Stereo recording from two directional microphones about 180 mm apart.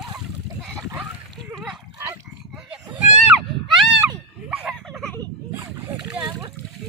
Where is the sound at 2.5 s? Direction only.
Centre (ahead or behind).